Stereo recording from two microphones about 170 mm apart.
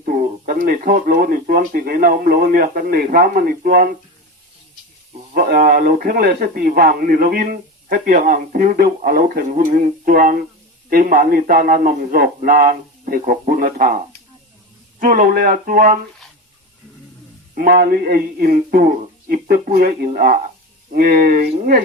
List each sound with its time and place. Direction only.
0.0 s speech: 55° right (ahead or behind)
5.3 s speech: 60° right (ahead or behind)
17.5 s speech: 55° right (ahead or behind)